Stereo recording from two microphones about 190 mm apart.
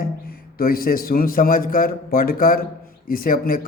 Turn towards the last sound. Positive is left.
turn(degrees=50)  # may be behind; listen again after turning